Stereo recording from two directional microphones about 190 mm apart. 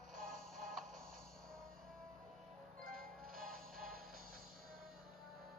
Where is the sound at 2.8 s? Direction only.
50° right (ahead or behind).